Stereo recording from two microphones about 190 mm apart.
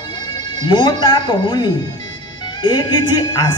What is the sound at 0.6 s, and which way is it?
A woman's voice, 25° left (ahead or behind).